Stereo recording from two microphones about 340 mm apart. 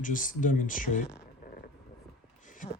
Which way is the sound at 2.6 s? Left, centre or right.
Left.